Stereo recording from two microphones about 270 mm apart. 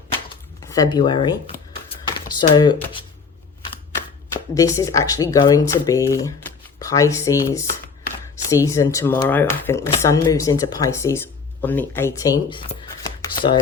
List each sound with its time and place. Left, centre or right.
0.6 s speech: centre
4.5 s speech: centre